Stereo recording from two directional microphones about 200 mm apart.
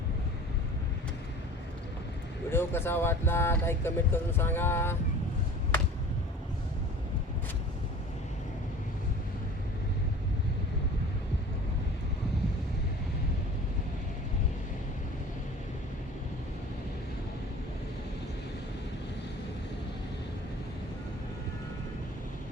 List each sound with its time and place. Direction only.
2.5 s speech: 10° left (ahead or behind)